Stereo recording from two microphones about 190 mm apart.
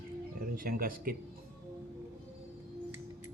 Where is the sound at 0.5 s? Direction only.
50° right (ahead or behind).